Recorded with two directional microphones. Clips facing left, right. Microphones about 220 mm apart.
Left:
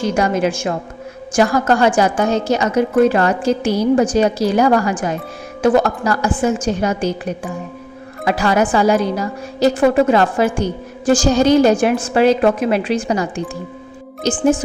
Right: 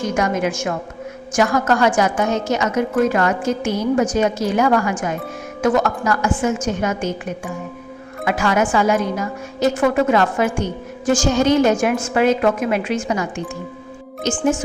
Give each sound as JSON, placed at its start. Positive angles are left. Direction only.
{"t": 0.0, "sound": "a woman's voice", "side_deg": 30}